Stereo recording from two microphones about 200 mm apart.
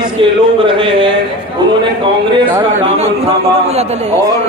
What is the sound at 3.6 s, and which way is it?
Speech, 30° right (ahead or behind).